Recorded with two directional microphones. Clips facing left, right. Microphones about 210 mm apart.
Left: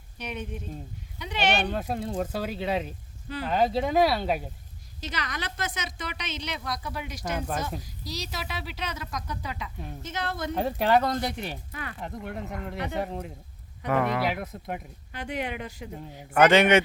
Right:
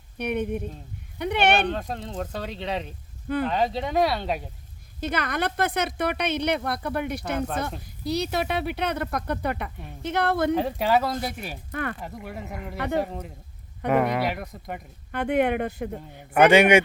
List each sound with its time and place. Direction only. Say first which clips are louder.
0.2 s speech: right 9 dB; 60° right (ahead or behind)
1.6 s speech: even; 5° left (ahead or behind)
4.9 s speech: right 8 dB; 55° right (ahead or behind)
7.3 s speech: right 2 dB; 5° left (ahead or behind)
7.8 s speech: right 10 dB; 60° right (ahead or behind)
10.5 s speech: right 1 dB; centre (ahead or behind)
11.7 s speech: right 9 dB; 55° right (ahead or behind)
11.9 s speech: left 1 dB; 5° right (ahead or behind)
13.8 s speech: right 3 dB; 20° right (ahead or behind)
14.3 s speech: even; centre (ahead or behind)
15.1 s speech: right 10 dB; 55° right (ahead or behind)
16.3 s a man's voice: right 3 dB; 10° right (ahead or behind)